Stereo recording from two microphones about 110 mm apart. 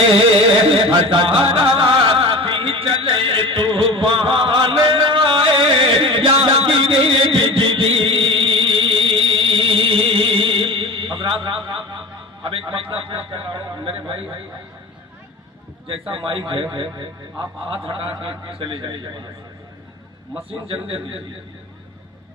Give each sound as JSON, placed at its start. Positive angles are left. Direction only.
{"t": 0.7, "sound": "music", "side_deg": -50}
{"t": 11.9, "sound": "a sound", "side_deg": -50}
{"t": 15.9, "sound": "a man's voice", "side_deg": -50}
{"t": 20.5, "sound": "a man's voice", "side_deg": -55}